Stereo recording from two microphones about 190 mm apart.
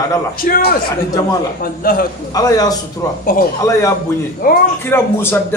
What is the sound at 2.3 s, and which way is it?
Speech, 20° left (ahead or behind).